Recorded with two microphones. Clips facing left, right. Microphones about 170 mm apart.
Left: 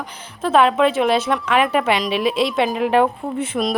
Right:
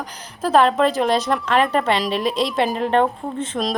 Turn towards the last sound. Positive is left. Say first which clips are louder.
# left 2 dB
turn(degrees=5)  # may be behind; listen again after turning